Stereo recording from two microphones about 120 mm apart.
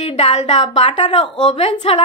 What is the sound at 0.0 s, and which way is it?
A woman's voice, 65° left (ahead or behind).